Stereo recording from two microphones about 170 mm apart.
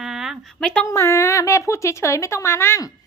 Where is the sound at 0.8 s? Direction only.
15° left (ahead or behind).